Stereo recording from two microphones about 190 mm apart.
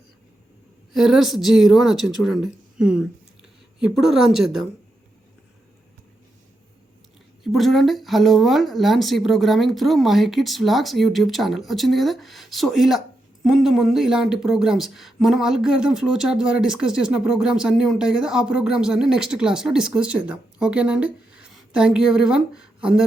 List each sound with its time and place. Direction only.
0.9 s speech: centre (ahead or behind)
7.4 s speech: centre (ahead or behind)